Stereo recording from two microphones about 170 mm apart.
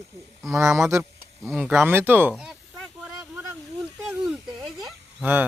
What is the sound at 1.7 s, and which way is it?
Speech, 15° right (ahead or behind).